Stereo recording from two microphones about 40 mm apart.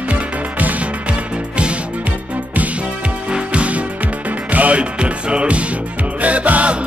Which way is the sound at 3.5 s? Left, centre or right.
Right.